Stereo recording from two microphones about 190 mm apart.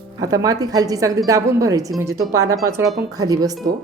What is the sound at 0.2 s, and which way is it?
Speech, 20° right (ahead or behind).